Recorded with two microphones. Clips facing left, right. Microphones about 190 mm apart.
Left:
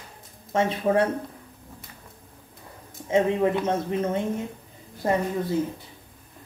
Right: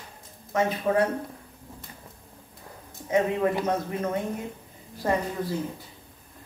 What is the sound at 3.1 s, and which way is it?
A woman's voice, 25° left (ahead or behind).